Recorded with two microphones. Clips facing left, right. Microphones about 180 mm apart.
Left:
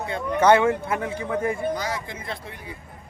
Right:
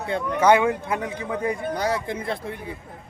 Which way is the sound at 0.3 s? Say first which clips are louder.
Left 1 dB; 10° right (ahead or behind).